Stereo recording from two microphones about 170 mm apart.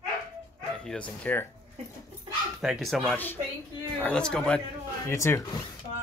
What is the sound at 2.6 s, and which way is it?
Speech, centre (ahead or behind).